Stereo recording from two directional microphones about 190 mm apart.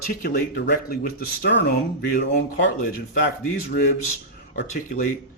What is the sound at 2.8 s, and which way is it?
Speech, 55° left (ahead or behind).